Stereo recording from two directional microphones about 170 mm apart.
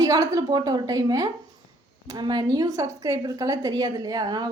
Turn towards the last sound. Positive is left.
turn(degrees=-25)  # may be behind; listen again after turning